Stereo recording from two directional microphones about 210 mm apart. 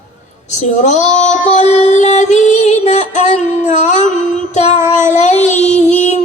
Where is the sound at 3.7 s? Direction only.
35° left (ahead or behind).